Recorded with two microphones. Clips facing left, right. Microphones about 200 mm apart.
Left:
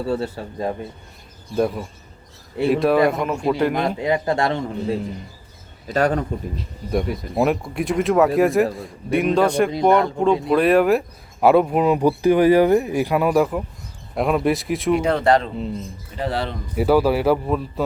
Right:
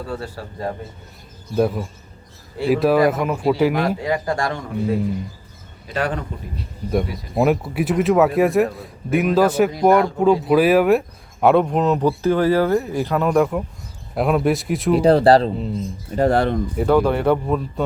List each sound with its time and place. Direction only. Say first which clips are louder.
0.1 s speech: left 5 dB; 25° left (ahead or behind)
1.5 s a man's voice: right 2 dB; centre (ahead or behind)
4.0 s speech: left 2 dB; 20° left (ahead or behind)
5.9 s a man's voice: left 4 dB; 40° left (ahead or behind)
6.6 s a man's voice: right 3 dB; centre (ahead or behind)
14.9 s speech: right 6 dB; 35° right (ahead or behind)
16.1 s speech: right 8 dB; 50° right (ahead or behind)
16.7 s a man's voice: left 2 dB; 5° left (ahead or behind)